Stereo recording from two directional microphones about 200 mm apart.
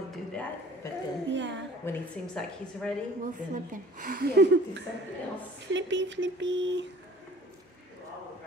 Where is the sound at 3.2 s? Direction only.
40° right (ahead or behind); by 6.8 s 65° right (ahead or behind).